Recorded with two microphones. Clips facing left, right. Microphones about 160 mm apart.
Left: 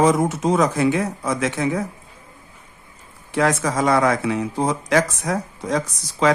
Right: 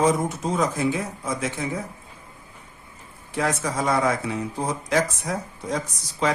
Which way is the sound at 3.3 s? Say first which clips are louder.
Left 5 dB; 90° left.